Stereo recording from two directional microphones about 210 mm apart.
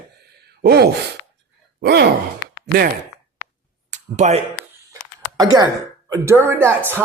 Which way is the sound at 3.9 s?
35° right (ahead or behind).